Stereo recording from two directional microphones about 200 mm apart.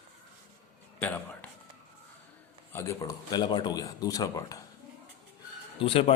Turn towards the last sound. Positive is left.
turn(degrees=25)  # may be behind; listen again after turning